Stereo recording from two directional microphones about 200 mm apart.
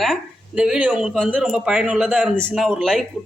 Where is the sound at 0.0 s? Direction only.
Centre (ahead or behind).